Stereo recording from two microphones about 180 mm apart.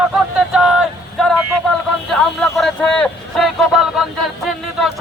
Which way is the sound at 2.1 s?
5° left (ahead or behind).